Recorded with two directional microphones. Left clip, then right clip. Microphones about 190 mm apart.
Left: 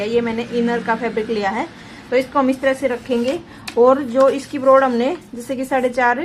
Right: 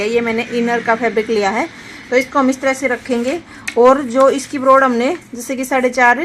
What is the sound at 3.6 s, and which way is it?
A woman's voice, 50° right (ahead or behind).